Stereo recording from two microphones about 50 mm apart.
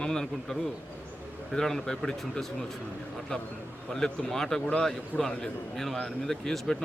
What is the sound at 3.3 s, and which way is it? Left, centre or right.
Speech, centre.